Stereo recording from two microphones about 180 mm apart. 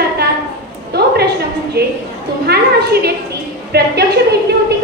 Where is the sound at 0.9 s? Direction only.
65° right (ahead or behind).